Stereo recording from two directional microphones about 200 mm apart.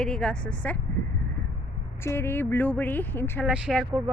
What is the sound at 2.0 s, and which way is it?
Speech, 10° left (ahead or behind).